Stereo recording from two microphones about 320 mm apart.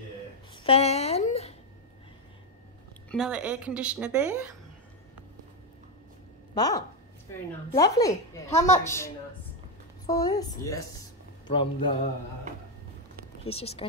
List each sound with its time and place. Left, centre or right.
0.7 s a sound: centre
3.1 s a woman's voice: centre
6.5 s speech: centre
8.5 s a woman's voice: left
8.8 s speech: centre
13.5 s speech: centre